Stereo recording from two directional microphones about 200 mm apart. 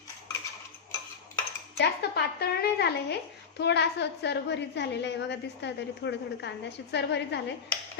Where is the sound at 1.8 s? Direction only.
55° left (ahead or behind).